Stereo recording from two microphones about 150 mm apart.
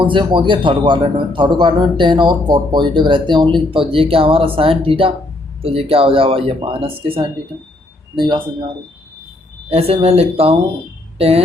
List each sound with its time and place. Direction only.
0.0 s a man's voice: 30° right (ahead or behind)
9.6 s speech: 40° right (ahead or behind)